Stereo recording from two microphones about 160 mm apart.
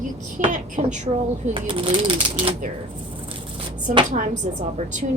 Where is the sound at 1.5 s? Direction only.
35° right (ahead or behind).